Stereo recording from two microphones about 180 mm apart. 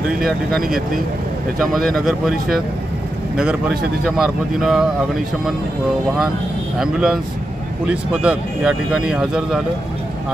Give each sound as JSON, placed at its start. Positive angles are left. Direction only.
{"t": 1.6, "sound": "speech", "side_deg": 5}
{"t": 6.8, "sound": "speech", "side_deg": -5}